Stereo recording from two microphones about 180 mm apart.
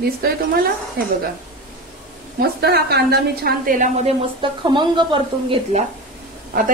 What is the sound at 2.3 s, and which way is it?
A woman's voice, 60° right (ahead or behind).